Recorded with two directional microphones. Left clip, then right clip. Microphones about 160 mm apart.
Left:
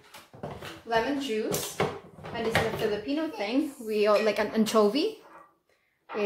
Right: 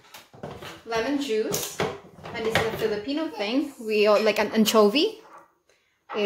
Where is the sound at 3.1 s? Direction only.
35° right (ahead or behind).